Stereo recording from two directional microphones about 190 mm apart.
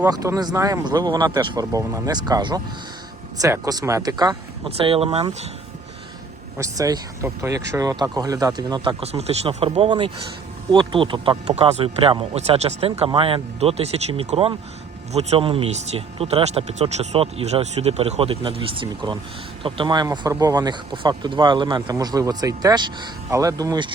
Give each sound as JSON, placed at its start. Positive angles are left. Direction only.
{"t": 0.0, "sound": "speech", "side_deg": -15}
{"t": 6.6, "sound": "speech", "side_deg": -20}